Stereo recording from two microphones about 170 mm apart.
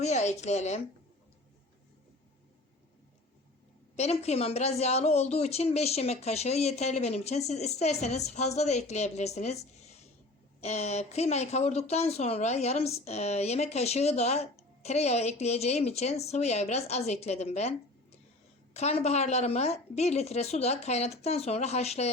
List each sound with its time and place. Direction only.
0.0 s a woman's voice: 40° left (ahead or behind)
3.9 s a woman's voice: 40° left (ahead or behind)